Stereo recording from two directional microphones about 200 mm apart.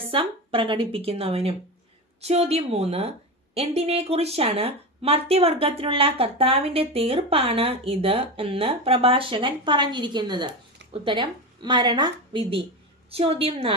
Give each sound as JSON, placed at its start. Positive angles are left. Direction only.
{"t": 0.1, "sound": "a woman's voice", "side_deg": -25}